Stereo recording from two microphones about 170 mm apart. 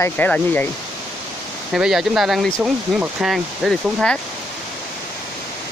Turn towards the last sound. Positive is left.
turn(degrees=5)  # may be behind; listen again after turning